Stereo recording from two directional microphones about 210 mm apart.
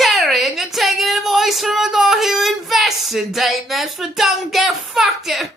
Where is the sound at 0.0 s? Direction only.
Centre (ahead or behind).